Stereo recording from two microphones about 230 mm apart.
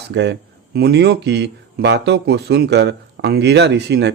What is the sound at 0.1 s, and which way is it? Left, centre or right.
Speech, right.